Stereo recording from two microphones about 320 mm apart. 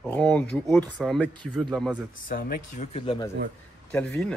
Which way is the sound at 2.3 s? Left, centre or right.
Left.